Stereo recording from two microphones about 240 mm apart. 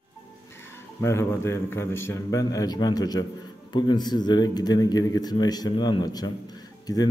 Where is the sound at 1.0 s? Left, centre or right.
Centre.